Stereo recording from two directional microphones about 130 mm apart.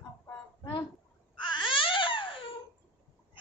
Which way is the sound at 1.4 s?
40° left (ahead or behind).